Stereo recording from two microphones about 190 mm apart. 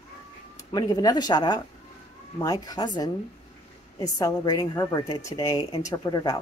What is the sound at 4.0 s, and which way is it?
A woman's voice, 20° left (ahead or behind).